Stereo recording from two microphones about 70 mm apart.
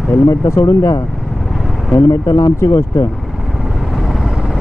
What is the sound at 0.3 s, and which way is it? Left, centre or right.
Speech, left.